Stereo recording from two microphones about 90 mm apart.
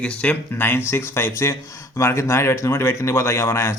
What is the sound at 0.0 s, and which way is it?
Speech, 15° left (ahead or behind).